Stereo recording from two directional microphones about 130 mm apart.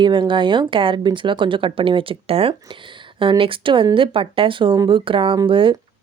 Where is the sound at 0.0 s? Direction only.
35° right (ahead or behind).